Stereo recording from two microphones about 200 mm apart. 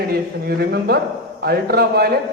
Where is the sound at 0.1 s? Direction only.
50° right (ahead or behind).